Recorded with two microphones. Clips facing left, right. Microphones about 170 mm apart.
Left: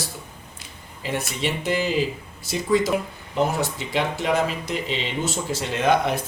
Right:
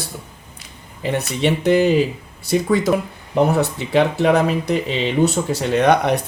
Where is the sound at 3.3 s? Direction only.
60° right (ahead or behind).